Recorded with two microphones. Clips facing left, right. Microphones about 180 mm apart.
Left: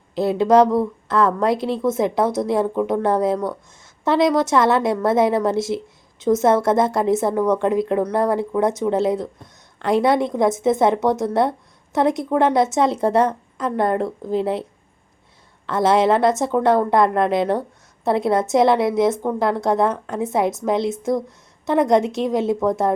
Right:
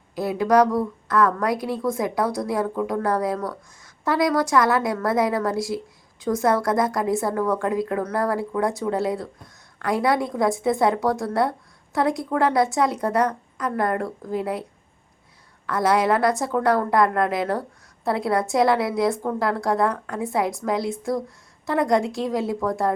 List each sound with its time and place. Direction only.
0.2 s a woman's voice: 25° left (ahead or behind)
15.6 s a woman's voice: 25° left (ahead or behind)